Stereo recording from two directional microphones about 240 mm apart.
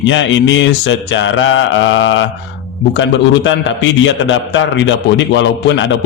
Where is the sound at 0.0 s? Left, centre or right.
Left.